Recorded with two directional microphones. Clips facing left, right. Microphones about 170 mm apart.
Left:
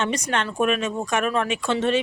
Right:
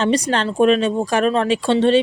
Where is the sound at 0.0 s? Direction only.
30° right (ahead or behind).